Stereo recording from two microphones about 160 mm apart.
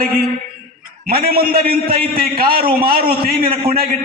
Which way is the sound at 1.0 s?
70° right (ahead or behind).